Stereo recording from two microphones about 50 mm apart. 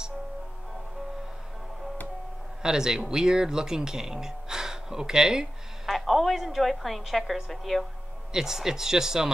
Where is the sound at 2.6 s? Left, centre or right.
Centre.